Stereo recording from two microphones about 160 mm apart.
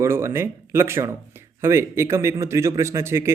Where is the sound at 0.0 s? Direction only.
15° right (ahead or behind).